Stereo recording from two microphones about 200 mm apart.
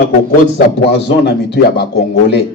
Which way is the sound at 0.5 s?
55° left (ahead or behind).